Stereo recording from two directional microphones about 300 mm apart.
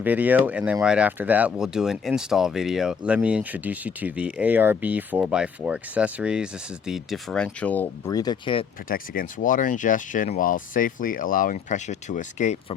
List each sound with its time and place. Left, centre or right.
0.0 s speech: centre
8.9 s speech: left